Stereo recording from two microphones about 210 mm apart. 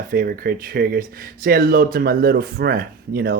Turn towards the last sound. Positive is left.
turn(degrees=-45)  # may be behind; listen again after turning